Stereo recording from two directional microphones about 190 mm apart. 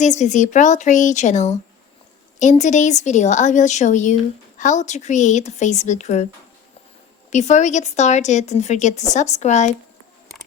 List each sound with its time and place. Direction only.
0.0 s speech: 40° left (ahead or behind)
7.3 s speech: 35° left (ahead or behind)